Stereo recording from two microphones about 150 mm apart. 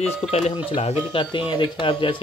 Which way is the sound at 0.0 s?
45° left (ahead or behind).